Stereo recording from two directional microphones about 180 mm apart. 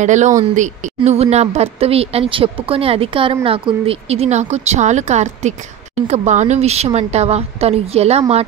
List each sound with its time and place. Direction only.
0.0 s a woman's voice: 40° right (ahead or behind)